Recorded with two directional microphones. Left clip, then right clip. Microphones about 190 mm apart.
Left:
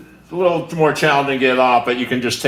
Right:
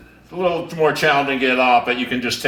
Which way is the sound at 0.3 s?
20° left (ahead or behind).